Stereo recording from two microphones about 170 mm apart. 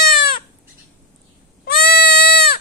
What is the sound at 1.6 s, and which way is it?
Goat, 65° left (ahead or behind).